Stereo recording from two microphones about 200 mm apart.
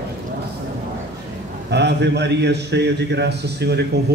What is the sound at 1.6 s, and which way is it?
A man's voice, 60° right (ahead or behind).